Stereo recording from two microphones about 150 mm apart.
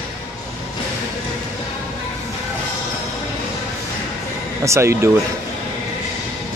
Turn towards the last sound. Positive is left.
turn(degrees=-20)  # may be behind; listen again after turning